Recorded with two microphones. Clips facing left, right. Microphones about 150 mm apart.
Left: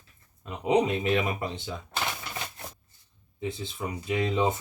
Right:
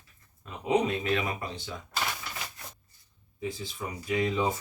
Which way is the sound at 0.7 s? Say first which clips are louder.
Left 3 dB; 20° left (ahead or behind).